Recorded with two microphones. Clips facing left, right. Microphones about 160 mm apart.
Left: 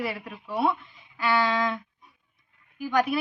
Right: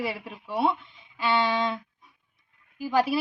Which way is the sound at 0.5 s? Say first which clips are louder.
Even; 25° right (ahead or behind).